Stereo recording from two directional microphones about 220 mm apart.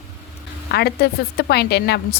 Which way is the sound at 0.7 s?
45° left (ahead or behind).